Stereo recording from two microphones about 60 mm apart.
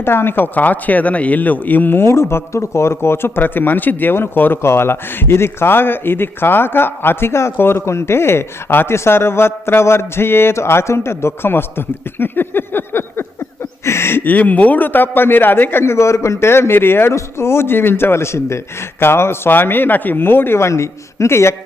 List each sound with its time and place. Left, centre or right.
0.0 s speech: left
2.0 s a man's voice: left
14.3 s a man's voice: left
20.7 s speech: left